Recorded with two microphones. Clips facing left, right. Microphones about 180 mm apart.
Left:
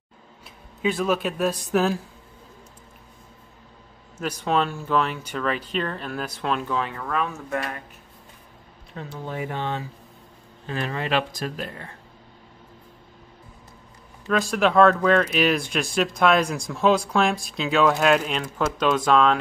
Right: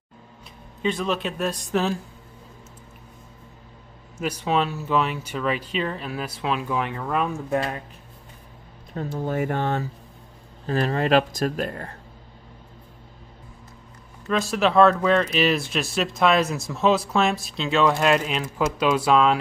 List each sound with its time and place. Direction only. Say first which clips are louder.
0.8 s speech: left 2 dB; 5° left (ahead or behind)
4.2 s speech: even; 10° right (ahead or behind)
6.8 s speech: right 2 dB; 20° right (ahead or behind)
8.9 s speech: right 6 dB; 40° right (ahead or behind)
14.2 s speech: left 1 dB; centre (ahead or behind)